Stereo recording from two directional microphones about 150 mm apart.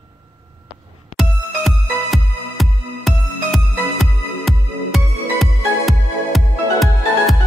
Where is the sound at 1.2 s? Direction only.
Centre (ahead or behind).